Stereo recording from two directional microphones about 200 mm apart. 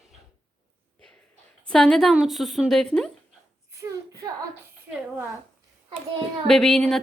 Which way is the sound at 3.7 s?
15° right (ahead or behind).